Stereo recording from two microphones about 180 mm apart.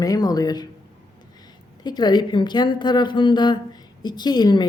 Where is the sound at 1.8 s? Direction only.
20° left (ahead or behind).